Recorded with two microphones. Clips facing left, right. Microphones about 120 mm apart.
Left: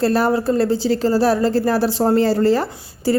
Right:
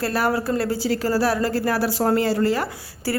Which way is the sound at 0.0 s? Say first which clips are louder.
Left 5 dB; 25° left (ahead or behind).